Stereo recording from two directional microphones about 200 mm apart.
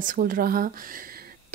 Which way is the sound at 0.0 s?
45° right (ahead or behind).